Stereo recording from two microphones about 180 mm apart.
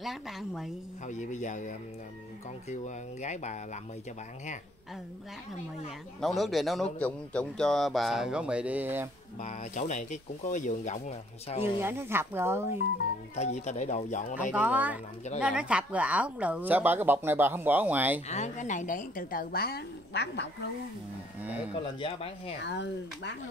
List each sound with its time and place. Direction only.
0.0 s a man's voice: centre (ahead or behind)
1.0 s speech: 45° left (ahead or behind)
6.2 s a man's voice: centre (ahead or behind)
9.4 s speech: 40° left (ahead or behind)
11.8 s speech: 15° right (ahead or behind)
13.4 s speech: 40° left (ahead or behind)
14.5 s speech: 10° right (ahead or behind)
18.3 s speech: 40° left (ahead or behind); by 20.4 s 70° left (ahead or behind)
22.6 s speech: 75° left (ahead or behind)